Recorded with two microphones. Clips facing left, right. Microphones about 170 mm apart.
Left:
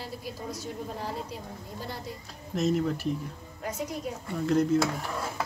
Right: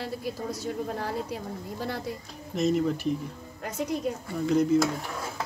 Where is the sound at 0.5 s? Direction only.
65° right (ahead or behind).